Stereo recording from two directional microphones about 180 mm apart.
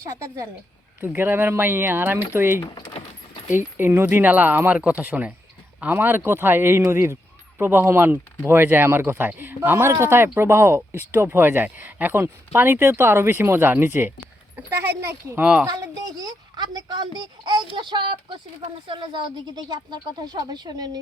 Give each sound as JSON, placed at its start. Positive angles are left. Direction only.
{"t": 0.0, "sound": "speech", "side_deg": -15}
{"t": 2.6, "sound": "speech", "side_deg": 25}
{"t": 3.5, "sound": "speech", "side_deg": -10}
{"t": 15.6, "sound": "a woman's voice", "side_deg": -20}